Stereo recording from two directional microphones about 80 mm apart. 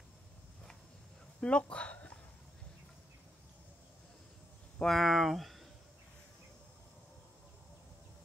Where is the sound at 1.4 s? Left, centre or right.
Centre.